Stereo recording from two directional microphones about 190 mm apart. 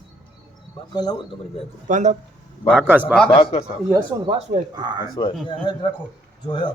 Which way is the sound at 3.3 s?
30° left (ahead or behind).